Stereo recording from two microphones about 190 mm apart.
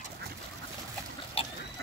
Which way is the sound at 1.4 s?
30° left (ahead or behind).